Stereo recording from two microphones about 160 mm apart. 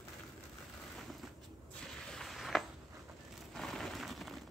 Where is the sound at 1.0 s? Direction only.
Centre (ahead or behind).